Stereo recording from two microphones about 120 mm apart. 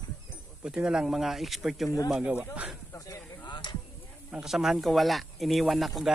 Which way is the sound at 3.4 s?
40° left (ahead or behind).